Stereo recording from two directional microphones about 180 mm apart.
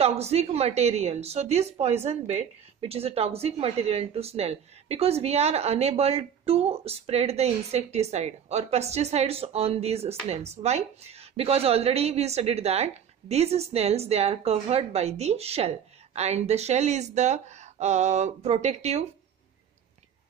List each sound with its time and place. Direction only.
0.0 s a woman's voice: 35° right (ahead or behind)